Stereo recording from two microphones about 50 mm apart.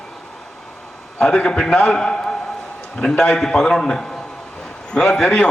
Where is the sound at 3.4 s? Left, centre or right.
Centre.